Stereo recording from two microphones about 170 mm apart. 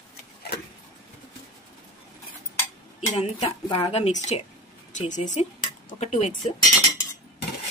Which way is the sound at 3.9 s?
40° left (ahead or behind).